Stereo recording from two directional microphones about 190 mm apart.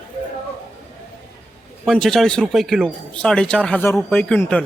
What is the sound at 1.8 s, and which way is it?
Speech, centre (ahead or behind).